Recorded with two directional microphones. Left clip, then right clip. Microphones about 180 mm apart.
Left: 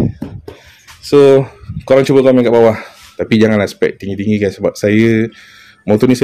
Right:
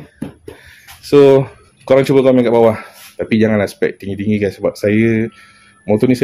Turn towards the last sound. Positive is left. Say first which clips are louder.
# left 2 dB
turn(degrees=25)  # may be behind; listen again after turning